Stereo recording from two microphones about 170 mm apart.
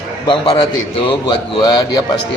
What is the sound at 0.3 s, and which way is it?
A man's voice, 30° left (ahead or behind).